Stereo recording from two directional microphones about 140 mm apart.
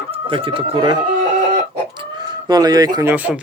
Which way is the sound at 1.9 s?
35° right (ahead or behind).